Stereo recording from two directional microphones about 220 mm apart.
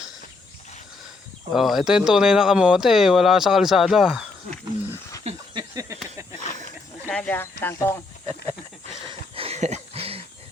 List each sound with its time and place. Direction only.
1.5 s speech: centre (ahead or behind)
5.2 s a sound: 20° right (ahead or behind)
7.1 s speech: 5° left (ahead or behind)
9.0 s wheeze: 25° right (ahead or behind)